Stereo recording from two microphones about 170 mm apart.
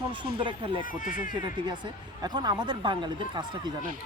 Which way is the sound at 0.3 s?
30° right (ahead or behind).